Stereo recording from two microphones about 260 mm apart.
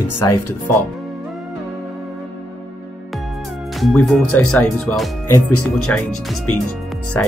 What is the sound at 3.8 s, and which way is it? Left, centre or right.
Speech, centre.